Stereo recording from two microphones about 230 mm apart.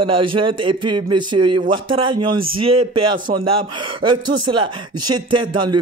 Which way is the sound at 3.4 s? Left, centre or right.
Right.